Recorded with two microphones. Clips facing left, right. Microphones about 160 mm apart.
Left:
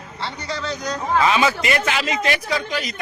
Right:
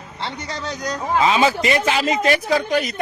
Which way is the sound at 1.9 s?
40° right (ahead or behind).